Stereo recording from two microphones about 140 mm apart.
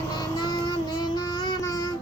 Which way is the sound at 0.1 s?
30° left (ahead or behind).